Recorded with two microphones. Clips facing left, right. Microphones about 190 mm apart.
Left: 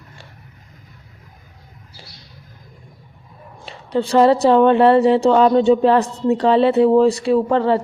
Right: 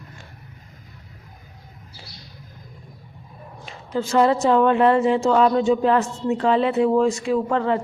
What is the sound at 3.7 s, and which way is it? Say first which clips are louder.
A woman's voice: left 5 dB; 35° left (ahead or behind).